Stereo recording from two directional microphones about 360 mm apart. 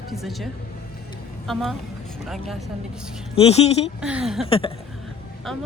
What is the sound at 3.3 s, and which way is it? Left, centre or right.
Speech, centre.